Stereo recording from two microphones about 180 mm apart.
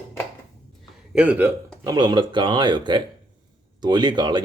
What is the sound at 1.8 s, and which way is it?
Speech, 25° right (ahead or behind).